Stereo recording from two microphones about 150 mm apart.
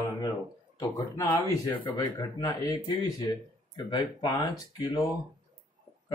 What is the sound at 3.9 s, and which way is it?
Speech, 25° left (ahead or behind).